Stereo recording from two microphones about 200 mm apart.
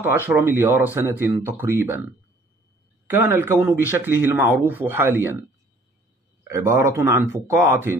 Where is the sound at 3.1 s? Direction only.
10° right (ahead or behind).